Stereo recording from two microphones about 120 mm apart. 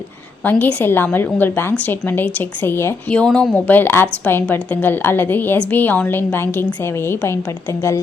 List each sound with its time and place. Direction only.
0.4 s a woman's voice: 15° left (ahead or behind)